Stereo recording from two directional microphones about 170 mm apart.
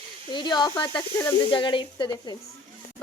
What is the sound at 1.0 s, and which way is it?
Speech, 10° left (ahead or behind).